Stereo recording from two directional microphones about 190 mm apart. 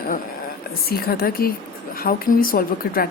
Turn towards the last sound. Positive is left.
turn(degrees=50)  # may be behind; listen again after turning